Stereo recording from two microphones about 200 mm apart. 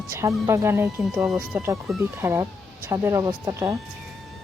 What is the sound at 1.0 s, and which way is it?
A woman's voice, centre (ahead or behind).